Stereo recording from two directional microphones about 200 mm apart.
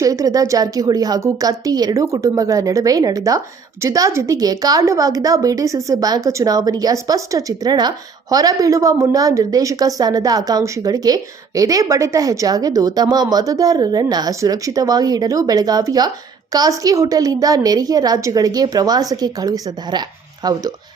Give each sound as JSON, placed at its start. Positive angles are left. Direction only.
{"t": 0.0, "sound": "a woman's voice", "side_deg": -15}